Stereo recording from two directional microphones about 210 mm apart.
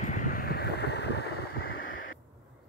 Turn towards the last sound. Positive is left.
turn(degrees=45)  # may be behind; listen again after turning